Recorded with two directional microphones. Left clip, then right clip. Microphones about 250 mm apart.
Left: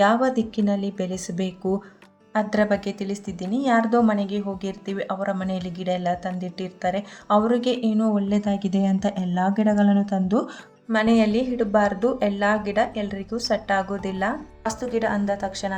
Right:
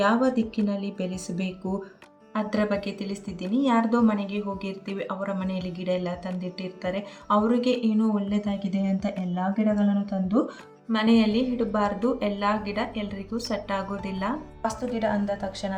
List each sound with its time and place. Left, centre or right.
0.0 s a woman's voice: left